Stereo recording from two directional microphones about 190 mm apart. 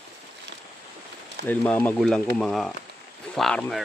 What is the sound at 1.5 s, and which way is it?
Speech, 10° left (ahead or behind).